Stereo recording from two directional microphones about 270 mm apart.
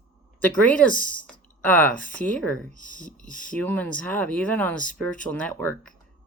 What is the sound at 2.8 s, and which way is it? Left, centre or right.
Speech, left.